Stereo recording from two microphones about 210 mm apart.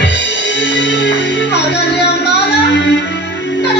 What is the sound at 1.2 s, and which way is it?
Music, 55° left (ahead or behind).